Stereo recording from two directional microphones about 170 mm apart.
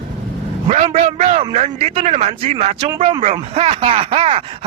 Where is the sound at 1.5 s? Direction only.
40° right (ahead or behind).